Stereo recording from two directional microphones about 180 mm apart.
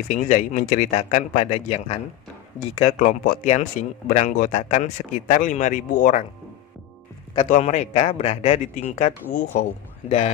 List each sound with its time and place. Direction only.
0.1 s a man's voice: 45° left (ahead or behind)
3.0 s a man's voice: 45° left (ahead or behind)
7.4 s a man's voice: 45° left (ahead or behind)
10.0 s a man's voice: 40° left (ahead or behind)